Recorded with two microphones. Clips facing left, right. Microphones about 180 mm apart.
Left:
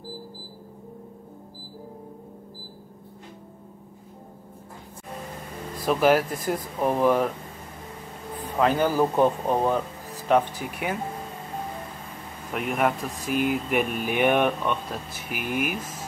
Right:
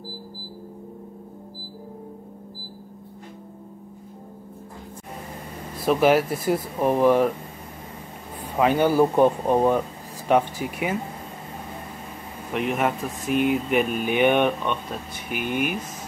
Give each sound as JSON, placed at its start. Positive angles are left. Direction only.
{"t": 5.9, "sound": "speech", "side_deg": -5}
{"t": 8.5, "sound": "speech", "side_deg": -10}
{"t": 12.5, "sound": "speech", "side_deg": 0}